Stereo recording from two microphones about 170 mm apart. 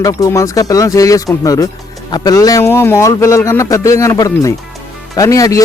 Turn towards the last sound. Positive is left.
turn(degrees=20)  # may be behind; listen again after turning